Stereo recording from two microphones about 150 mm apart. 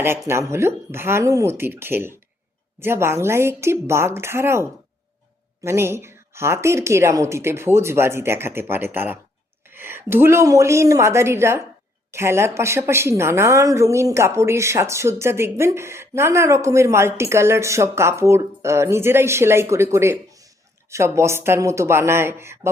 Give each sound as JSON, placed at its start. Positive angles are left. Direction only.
{"t": 0.3, "sound": "a woman's voice", "side_deg": -20}
{"t": 5.6, "sound": "a woman's voice", "side_deg": -15}